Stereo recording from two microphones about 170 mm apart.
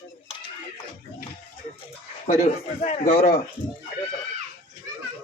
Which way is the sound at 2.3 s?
40° left (ahead or behind).